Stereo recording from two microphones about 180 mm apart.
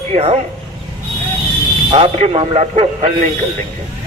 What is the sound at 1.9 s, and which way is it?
A man's voice, 35° right (ahead or behind).